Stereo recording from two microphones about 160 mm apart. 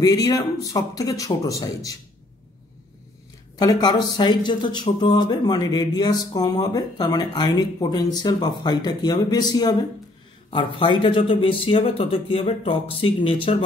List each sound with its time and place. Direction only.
0.0 s speech: 25° left (ahead or behind)
3.5 s a man's voice: 25° left (ahead or behind)